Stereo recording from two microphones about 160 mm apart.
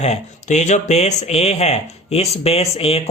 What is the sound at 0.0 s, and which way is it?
Speech, 45° left (ahead or behind).